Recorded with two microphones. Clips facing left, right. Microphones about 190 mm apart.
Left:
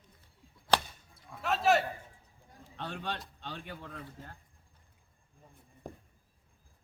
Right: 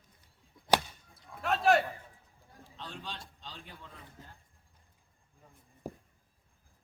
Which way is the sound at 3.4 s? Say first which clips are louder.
Left 6 dB; 60° left (ahead or behind).